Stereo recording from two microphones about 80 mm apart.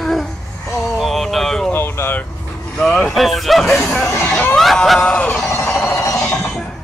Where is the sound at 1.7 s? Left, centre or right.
Left.